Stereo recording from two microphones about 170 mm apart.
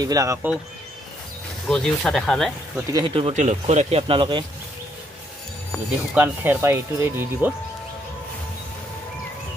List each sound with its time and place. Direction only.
0.0 s speech: 20° right (ahead or behind)
1.7 s speech: 5° left (ahead or behind)
2.9 s speech: 30° right (ahead or behind)
3.3 s speech: 45° right (ahead or behind)
6.1 s speech: 10° right (ahead or behind)